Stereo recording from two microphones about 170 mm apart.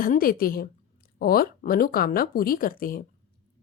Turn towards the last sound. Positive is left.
turn(degrees=60)  # may be behind; listen again after turning